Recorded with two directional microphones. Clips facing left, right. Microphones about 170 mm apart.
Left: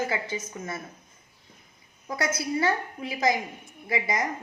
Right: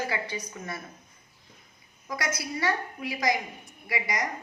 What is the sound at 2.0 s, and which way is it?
A woman's voice, 30° left (ahead or behind).